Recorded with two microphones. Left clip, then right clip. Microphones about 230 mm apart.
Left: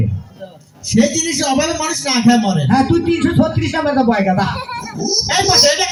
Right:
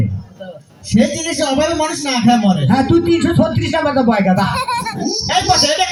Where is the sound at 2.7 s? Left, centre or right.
Right.